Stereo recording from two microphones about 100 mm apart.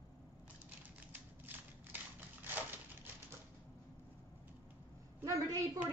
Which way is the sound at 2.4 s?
20° right (ahead or behind).